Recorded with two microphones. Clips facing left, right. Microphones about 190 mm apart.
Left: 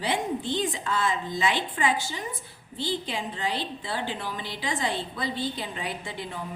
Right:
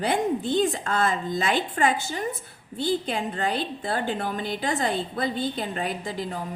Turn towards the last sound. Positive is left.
turn(degrees=-40)  # may be behind; listen again after turning